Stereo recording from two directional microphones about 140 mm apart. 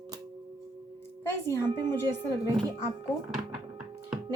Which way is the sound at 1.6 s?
30° right (ahead or behind).